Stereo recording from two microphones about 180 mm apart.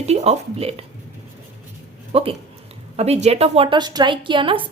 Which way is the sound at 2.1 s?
30° right (ahead or behind).